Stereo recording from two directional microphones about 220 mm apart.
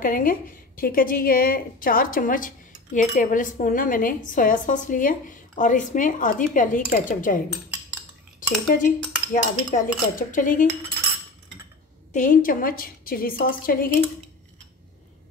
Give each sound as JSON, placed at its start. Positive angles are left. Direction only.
{"t": 0.0, "sound": "a woman's voice", "side_deg": 40}
{"t": 12.1, "sound": "a woman's voice", "side_deg": 35}